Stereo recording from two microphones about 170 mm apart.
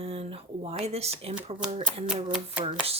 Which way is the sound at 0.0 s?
35° right (ahead or behind).